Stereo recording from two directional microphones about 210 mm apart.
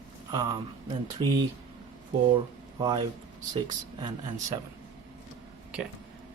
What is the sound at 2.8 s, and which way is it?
Speech, 20° right (ahead or behind).